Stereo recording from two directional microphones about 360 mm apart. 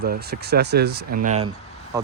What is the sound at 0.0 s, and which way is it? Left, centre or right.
Speech, right.